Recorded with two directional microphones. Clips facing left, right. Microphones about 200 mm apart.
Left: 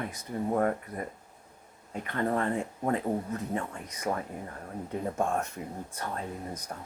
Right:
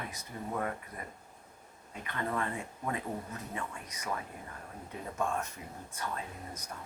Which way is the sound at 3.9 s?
30° left (ahead or behind).